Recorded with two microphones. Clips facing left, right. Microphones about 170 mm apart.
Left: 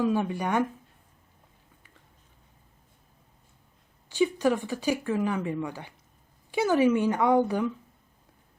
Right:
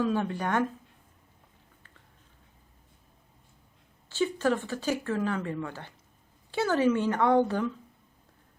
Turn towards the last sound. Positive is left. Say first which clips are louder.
# left 1 dB
turn(degrees=10)  # may be behind; listen again after turning